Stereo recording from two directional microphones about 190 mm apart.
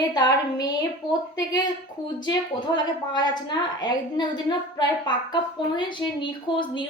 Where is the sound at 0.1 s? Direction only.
20° left (ahead or behind).